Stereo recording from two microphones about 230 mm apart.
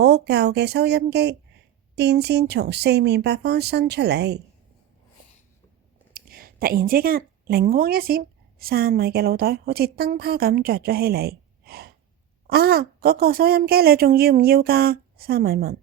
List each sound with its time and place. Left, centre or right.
0.0 s speech: right
6.1 s a woman's voice: right